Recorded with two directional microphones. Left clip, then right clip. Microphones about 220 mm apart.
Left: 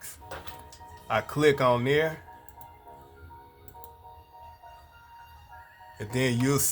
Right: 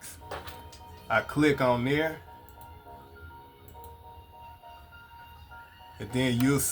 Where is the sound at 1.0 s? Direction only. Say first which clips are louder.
Left 1 dB; 45° left (ahead or behind).